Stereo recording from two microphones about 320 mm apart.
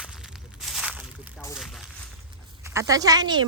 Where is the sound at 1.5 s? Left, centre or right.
Centre.